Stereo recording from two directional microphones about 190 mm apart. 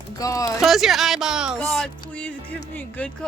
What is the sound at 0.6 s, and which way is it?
Speech, centre (ahead or behind).